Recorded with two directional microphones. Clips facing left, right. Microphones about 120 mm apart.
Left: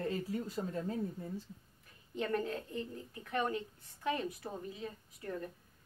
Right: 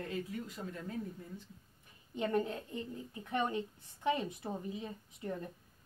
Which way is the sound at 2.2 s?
20° right (ahead or behind).